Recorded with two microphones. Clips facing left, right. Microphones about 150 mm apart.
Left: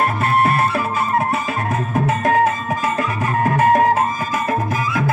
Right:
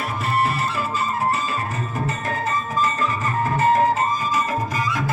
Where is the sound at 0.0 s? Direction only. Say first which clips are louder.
Left 6 dB; 60° left (ahead or behind); by 4.0 s 75° left (ahead or behind).